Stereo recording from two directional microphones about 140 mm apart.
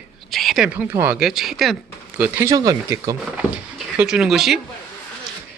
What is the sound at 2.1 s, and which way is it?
Speech, 15° right (ahead or behind).